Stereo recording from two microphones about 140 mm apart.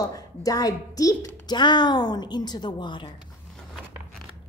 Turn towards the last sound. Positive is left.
turn(degrees=35)  # may be behind; listen again after turning